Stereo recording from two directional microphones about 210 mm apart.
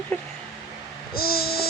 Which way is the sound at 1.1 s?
45° left (ahead or behind).